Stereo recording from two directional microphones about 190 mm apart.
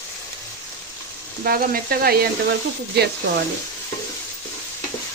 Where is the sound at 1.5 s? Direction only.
50° right (ahead or behind).